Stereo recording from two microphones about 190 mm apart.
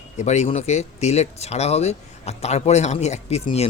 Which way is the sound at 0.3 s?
35° left (ahead or behind).